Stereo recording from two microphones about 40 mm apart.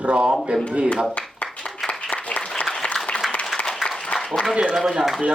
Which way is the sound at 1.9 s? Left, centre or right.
Left.